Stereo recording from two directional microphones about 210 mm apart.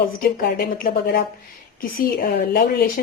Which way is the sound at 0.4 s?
45° left (ahead or behind).